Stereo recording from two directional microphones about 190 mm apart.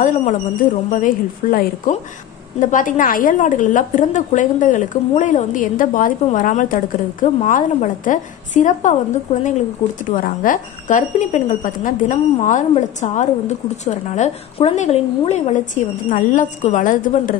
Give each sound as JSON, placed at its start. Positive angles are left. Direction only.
{"t": 0.0, "sound": "a woman's voice", "side_deg": 40}